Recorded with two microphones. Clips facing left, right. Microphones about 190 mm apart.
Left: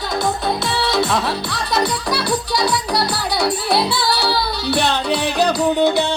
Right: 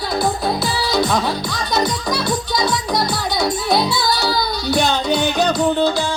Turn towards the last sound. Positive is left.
turn(degrees=35)  # may be behind; listen again after turning